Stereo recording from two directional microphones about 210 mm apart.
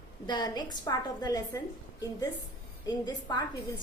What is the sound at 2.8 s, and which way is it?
Speech, 20° left (ahead or behind).